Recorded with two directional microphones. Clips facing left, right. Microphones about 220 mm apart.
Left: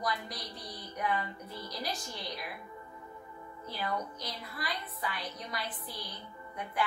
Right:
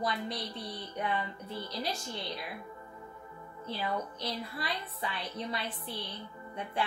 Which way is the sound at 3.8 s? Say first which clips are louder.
Right 1 dB; 30° right (ahead or behind).